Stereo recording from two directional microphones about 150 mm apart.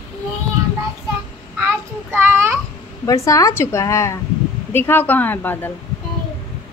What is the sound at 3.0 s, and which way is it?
A woman's voice, 20° left (ahead or behind).